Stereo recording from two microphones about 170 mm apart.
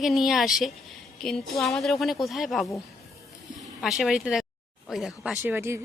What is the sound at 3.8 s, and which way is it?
Speech, centre (ahead or behind).